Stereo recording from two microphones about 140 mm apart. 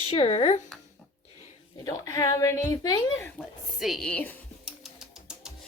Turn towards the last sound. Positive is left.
turn(degrees=-5)  # may be behind; listen again after turning